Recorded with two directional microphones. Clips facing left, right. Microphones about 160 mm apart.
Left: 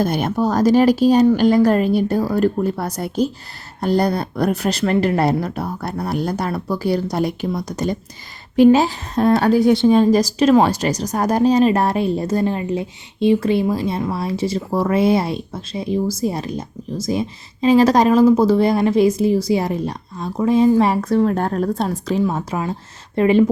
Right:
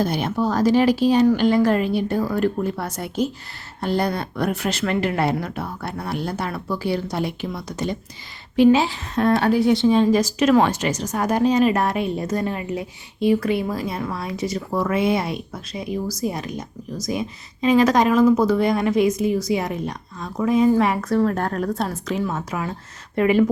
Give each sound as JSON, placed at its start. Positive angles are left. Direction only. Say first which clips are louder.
{"t": 0.0, "sound": "speech", "louder": "left 3 dB", "side_deg": 50}
{"t": 21.0, "sound": "a woman's voice", "louder": "left 3 dB", "side_deg": 20}